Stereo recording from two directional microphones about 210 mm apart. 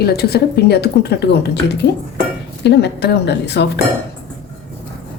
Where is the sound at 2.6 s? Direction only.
55° left (ahead or behind).